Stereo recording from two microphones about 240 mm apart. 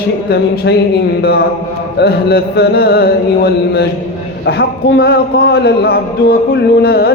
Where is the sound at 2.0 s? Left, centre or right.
Left.